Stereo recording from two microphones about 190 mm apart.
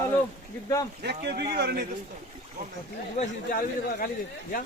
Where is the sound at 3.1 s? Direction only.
45° left (ahead or behind).